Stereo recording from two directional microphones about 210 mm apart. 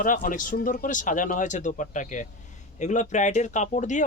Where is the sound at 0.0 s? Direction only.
40° left (ahead or behind).